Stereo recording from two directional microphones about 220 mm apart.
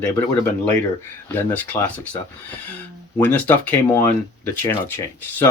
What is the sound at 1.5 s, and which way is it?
Speech, 5° left (ahead or behind).